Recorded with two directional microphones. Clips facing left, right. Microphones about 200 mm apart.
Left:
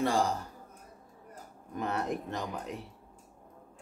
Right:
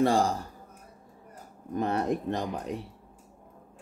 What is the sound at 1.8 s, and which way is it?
Speech, 35° right (ahead or behind).